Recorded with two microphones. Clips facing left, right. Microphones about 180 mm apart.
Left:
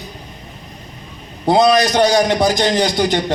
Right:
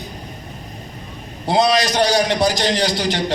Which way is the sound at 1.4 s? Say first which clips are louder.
Left 4 dB; 55° left (ahead or behind).